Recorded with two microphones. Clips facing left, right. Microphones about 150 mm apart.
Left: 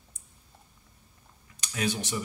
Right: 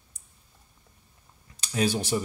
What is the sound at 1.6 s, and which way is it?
Speech, 35° right (ahead or behind).